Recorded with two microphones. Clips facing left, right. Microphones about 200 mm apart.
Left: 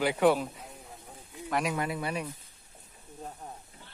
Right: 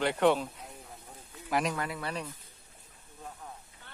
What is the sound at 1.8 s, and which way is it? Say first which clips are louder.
Speech: left 3 dB; 15° left (ahead or behind).